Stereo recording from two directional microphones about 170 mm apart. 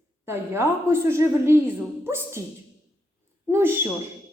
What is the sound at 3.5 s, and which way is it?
Speech, 15° right (ahead or behind).